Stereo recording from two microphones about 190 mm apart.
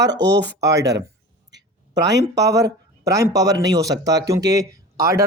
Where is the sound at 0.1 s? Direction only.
65° right (ahead or behind).